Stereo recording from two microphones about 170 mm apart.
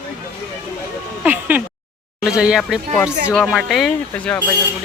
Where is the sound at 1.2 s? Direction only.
10° right (ahead or behind).